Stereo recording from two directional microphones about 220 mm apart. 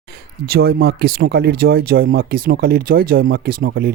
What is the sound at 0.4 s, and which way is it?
Speech, 45° right (ahead or behind).